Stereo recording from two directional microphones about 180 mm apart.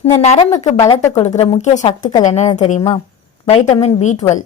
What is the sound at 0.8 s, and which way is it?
Speech, 20° left (ahead or behind).